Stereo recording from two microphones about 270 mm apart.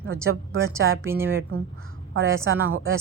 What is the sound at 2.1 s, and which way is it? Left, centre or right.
Speech, right.